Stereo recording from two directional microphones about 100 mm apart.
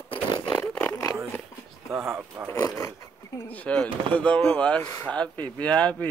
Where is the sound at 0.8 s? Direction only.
30° left (ahead or behind).